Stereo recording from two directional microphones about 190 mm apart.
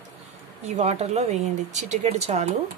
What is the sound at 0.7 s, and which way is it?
A woman's voice, 35° right (ahead or behind).